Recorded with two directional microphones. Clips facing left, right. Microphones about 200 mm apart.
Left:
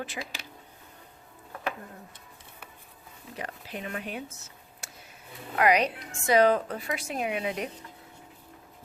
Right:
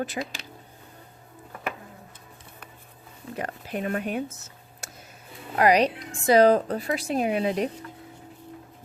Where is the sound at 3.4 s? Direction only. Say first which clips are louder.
Right 7 dB; 50° right (ahead or behind).